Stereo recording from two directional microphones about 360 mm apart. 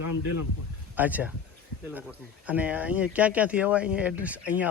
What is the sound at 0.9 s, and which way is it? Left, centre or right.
Speech, centre.